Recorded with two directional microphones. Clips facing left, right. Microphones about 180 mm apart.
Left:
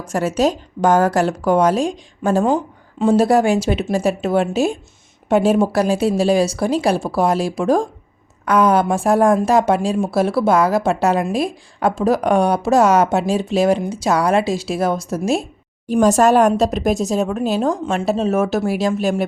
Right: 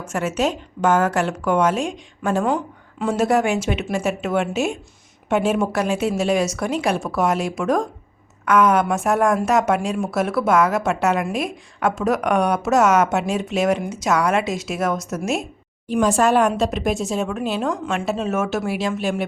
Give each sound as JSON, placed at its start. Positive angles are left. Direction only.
{"t": 0.0, "sound": "a woman's voice", "side_deg": 35}